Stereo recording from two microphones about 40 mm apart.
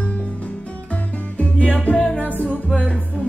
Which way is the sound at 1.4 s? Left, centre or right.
Left.